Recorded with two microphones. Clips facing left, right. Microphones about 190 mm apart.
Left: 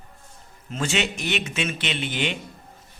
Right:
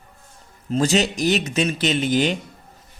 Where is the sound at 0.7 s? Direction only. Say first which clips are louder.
Right 7 dB; 35° right (ahead or behind).